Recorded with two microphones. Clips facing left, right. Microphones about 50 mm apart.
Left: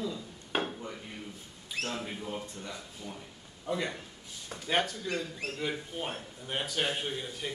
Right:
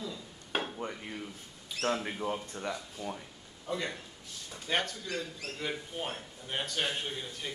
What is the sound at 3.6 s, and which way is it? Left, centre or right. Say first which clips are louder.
A man's voice: left 2 dB; centre.